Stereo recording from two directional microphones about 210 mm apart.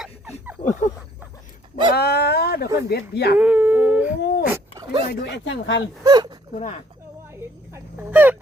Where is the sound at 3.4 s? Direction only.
10° right (ahead or behind).